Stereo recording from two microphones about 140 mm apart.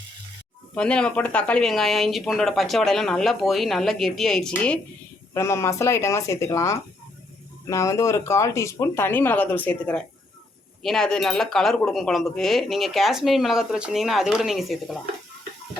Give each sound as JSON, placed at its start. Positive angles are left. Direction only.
{"t": 0.8, "sound": "speech", "side_deg": 5}
{"t": 5.3, "sound": "speech", "side_deg": 20}